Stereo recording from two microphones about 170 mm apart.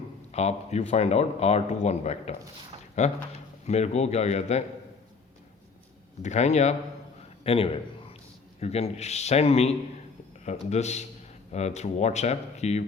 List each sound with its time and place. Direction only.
0.3 s speech: 40° left (ahead or behind)
6.2 s speech: 40° left (ahead or behind)